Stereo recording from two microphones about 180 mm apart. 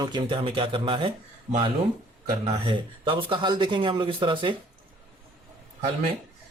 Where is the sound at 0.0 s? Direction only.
25° right (ahead or behind).